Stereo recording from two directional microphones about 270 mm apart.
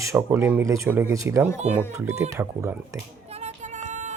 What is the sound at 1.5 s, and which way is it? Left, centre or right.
Speech, right.